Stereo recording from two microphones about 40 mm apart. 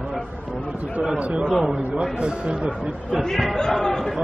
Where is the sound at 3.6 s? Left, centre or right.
Centre.